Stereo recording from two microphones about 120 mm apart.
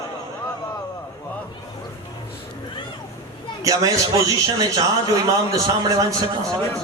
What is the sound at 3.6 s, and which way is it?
A man's voice, 30° right (ahead or behind).